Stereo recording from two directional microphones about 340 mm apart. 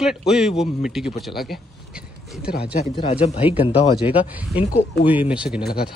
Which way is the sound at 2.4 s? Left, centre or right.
Left.